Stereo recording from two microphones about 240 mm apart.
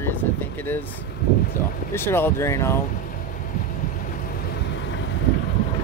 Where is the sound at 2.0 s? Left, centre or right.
Centre.